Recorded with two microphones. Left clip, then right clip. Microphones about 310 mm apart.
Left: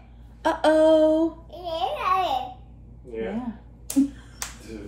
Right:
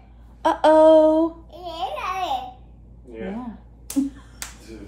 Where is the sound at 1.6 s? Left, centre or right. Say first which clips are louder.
Left 2 dB; centre.